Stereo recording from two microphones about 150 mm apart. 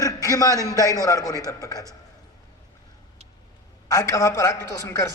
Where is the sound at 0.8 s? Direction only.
25° left (ahead or behind).